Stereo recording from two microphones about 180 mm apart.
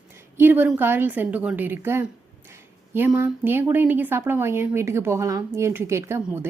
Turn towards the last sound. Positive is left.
turn(degrees=-15)  # may be behind; listen again after turning